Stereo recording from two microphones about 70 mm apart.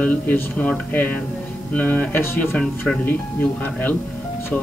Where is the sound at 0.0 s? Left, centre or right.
Left.